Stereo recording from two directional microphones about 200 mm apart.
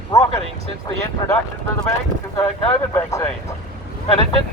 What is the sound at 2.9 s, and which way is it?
Speech, 15° left (ahead or behind).